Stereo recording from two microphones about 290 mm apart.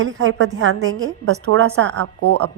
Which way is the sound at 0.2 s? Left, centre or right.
Right.